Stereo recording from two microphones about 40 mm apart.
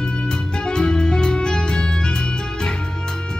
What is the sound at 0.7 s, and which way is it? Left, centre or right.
Music, centre.